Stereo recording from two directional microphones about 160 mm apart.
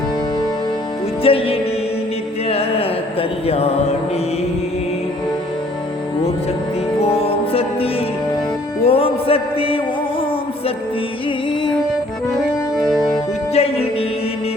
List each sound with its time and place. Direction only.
1.2 s music: 35° left (ahead or behind)
7.0 s music: 40° left (ahead or behind)
13.5 s music: 40° left (ahead or behind)